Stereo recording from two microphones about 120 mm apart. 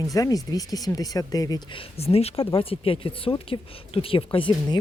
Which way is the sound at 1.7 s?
55° left (ahead or behind).